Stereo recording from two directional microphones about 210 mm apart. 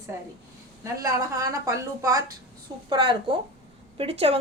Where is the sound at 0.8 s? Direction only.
15° right (ahead or behind).